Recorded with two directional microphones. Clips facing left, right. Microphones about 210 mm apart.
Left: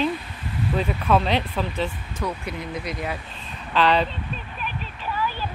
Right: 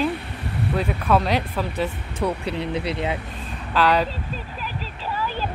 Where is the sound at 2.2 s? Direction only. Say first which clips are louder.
Right 5 dB; 30° right (ahead or behind).